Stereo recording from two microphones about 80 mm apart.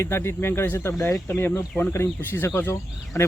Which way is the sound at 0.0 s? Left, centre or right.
Left.